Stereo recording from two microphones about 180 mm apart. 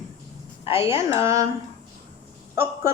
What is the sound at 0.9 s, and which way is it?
Speech, 15° right (ahead or behind).